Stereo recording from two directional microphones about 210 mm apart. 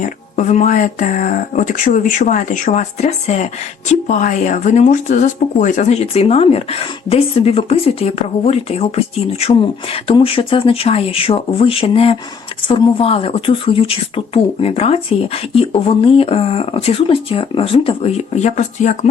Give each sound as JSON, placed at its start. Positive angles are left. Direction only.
{"t": 0.0, "sound": "speech", "side_deg": 35}